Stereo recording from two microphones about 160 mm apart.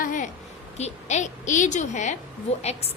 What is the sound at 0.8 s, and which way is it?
A woman's voice, 45° left (ahead or behind).